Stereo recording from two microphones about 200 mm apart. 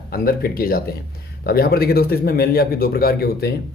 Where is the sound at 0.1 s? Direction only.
50° left (ahead or behind).